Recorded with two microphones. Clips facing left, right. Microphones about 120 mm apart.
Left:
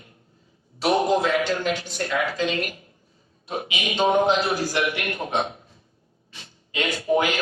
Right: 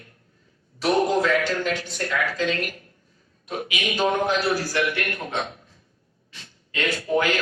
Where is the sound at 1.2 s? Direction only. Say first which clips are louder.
Right 1 dB; 20° left (ahead or behind).